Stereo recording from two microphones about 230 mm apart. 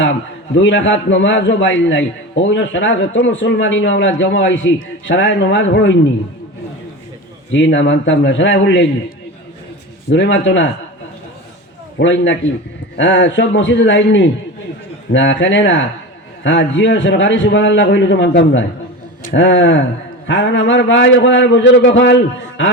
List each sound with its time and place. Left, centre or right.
0.0 s a man's voice: left
7.5 s a man's voice: left
10.1 s a man's voice: left
11.9 s a man's voice: left